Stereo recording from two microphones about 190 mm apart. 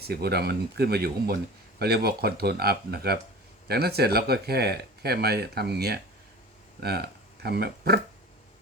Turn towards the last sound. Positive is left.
turn(degrees=-55)  # may be behind; listen again after turning